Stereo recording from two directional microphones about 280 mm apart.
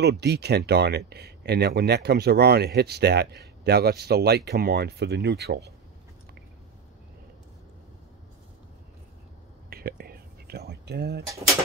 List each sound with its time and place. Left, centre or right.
0.0 s speech: right
9.7 s whispering: right